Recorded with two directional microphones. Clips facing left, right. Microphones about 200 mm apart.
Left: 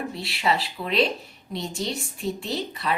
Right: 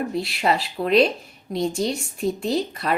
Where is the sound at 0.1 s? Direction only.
45° right (ahead or behind).